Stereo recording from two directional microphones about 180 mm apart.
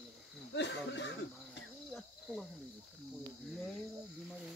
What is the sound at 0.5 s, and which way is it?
Speech, 75° left (ahead or behind).